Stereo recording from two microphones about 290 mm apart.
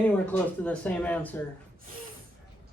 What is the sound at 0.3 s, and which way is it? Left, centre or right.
Speech, centre.